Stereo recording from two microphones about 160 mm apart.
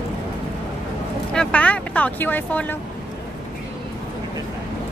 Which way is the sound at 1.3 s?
5° left (ahead or behind).